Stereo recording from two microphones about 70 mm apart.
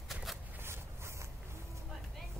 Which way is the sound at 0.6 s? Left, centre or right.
Right.